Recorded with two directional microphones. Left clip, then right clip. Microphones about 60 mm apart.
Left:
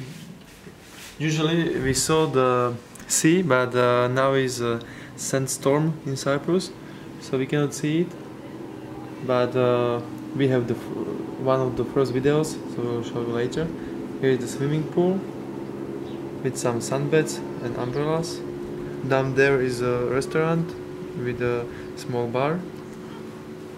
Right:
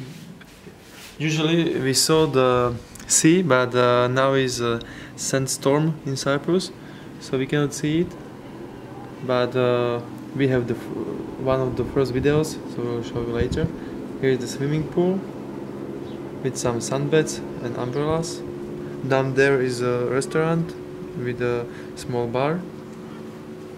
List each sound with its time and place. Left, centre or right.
1.2 s speech: right; by 8.0 s centre
9.3 s speech: centre
16.4 s speech: centre